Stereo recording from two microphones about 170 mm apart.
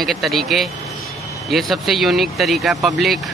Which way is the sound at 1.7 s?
Centre (ahead or behind).